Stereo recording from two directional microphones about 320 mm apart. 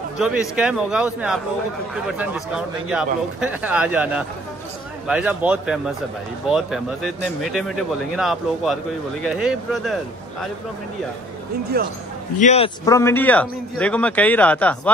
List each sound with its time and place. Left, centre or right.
0.2 s a man's voice: centre
11.7 s speech: right
12.4 s a man's voice: centre